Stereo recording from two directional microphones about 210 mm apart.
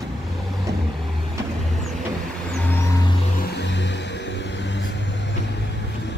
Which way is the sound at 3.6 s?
55° left (ahead or behind).